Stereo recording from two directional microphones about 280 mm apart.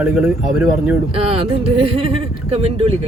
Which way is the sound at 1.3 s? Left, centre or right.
Right.